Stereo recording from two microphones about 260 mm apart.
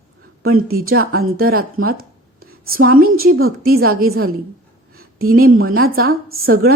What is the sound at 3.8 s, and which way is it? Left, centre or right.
Speech, right.